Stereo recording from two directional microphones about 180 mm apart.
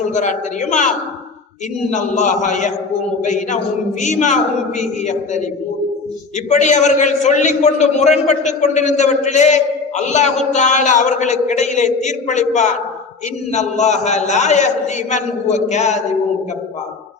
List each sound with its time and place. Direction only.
0.1 s a man's voice: 40° left (ahead or behind)
6.5 s a man's voice: 40° left (ahead or behind)